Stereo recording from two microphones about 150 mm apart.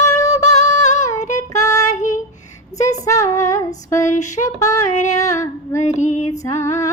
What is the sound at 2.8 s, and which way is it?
Female singing, 20° left (ahead or behind).